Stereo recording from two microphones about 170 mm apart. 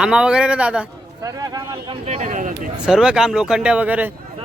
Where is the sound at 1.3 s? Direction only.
20° right (ahead or behind).